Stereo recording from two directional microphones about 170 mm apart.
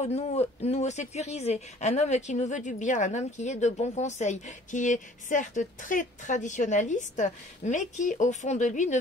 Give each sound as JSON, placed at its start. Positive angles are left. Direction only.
{"t": 0.0, "sound": "speech", "side_deg": 40}